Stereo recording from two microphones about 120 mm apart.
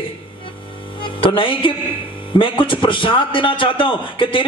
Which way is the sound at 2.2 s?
45° left (ahead or behind).